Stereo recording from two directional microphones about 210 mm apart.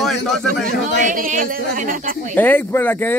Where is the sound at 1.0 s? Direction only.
40° right (ahead or behind).